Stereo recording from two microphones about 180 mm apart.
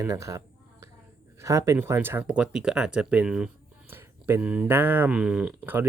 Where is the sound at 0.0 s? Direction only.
15° right (ahead or behind).